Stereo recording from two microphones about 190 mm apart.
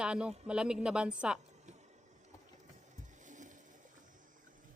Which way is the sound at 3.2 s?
40° right (ahead or behind).